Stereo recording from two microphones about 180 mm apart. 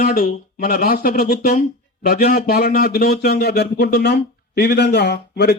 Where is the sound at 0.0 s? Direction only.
50° left (ahead or behind).